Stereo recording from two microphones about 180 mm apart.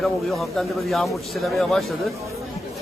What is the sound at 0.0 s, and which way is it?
A man's voice, centre (ahead or behind).